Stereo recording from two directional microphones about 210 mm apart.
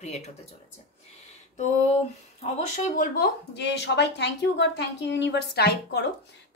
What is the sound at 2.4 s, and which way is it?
Speech, 35° left (ahead or behind).